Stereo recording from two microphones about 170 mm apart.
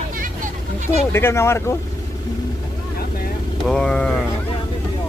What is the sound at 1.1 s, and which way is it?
Speech, 15° left (ahead or behind).